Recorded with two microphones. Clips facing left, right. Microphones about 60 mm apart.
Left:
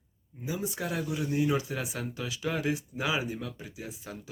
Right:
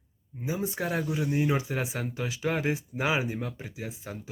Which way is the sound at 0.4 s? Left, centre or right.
Right.